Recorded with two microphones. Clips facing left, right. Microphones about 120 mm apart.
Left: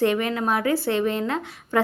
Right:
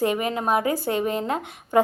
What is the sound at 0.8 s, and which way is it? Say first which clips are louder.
Speech: left 1 dB; 40° right (ahead or behind).